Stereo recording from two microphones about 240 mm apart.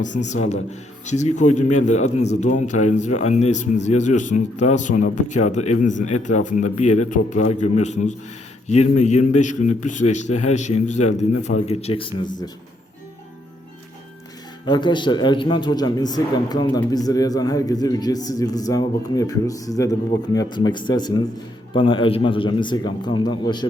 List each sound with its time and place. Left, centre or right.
0.0 s a man's voice: left
14.7 s a man's voice: centre